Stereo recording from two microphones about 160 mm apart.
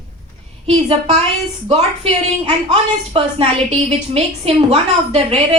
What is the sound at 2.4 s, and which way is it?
A woman's voice, 35° right (ahead or behind).